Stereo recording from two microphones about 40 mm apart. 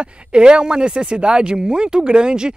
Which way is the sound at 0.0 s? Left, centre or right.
Right.